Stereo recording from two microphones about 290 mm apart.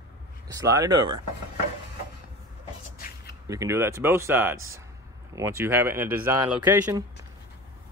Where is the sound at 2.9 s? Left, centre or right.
Left.